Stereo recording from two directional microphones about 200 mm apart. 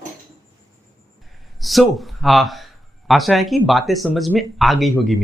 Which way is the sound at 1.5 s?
Centre (ahead or behind).